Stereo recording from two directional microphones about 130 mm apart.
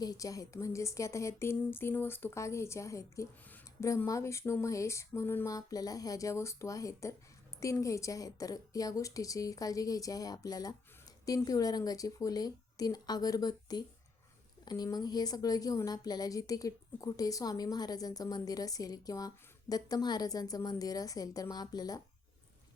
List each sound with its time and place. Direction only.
0.0 s a woman's voice: 30° left (ahead or behind)